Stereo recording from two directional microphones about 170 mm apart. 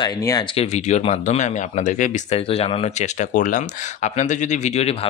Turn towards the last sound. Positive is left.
turn(degrees=35)  # may be behind; listen again after turning